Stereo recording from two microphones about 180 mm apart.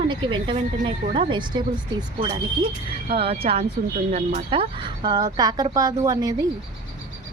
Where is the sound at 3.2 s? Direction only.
35° right (ahead or behind).